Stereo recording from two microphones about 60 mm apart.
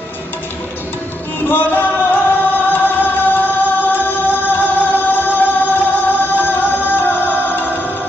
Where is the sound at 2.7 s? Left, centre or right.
Left.